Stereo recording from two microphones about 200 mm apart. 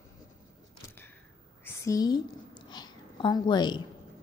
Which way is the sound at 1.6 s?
15° left (ahead or behind).